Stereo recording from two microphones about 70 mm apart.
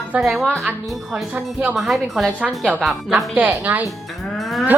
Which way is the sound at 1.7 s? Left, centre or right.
Centre.